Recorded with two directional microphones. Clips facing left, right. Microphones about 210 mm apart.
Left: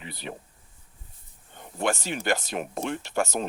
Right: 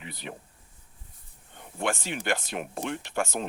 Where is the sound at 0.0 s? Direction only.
30° left (ahead or behind).